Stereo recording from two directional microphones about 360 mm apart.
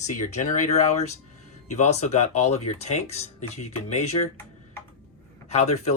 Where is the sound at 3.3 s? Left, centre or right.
Left.